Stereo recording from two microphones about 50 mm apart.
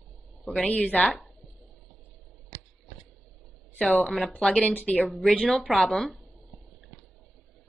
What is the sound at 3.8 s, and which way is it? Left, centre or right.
Speech, left.